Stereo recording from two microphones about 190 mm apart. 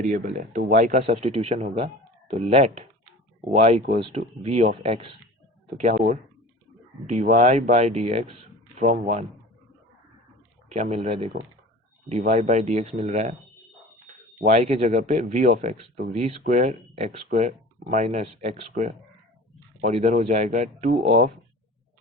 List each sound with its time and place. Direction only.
0.0 s speech: 45° right (ahead or behind)
10.7 s speech: 35° right (ahead or behind)
14.4 s speech: 40° right (ahead or behind)